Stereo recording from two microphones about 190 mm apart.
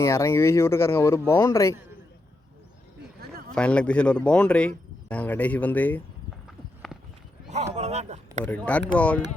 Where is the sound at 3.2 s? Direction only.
55° right (ahead or behind).